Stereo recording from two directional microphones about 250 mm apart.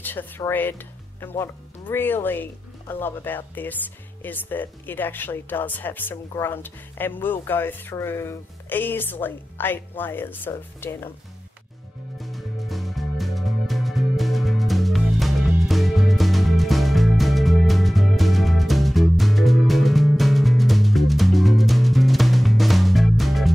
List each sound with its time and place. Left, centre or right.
0.0 s speech: centre
12.2 s music: centre